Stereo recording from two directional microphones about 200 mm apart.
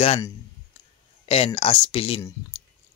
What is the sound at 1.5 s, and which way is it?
Speech, 25° left (ahead or behind).